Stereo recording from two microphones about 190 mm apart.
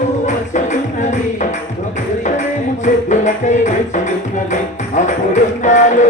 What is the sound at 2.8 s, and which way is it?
Music, 40° left (ahead or behind).